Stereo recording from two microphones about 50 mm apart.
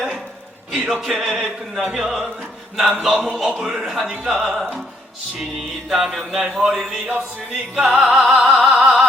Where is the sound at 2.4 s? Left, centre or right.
Centre.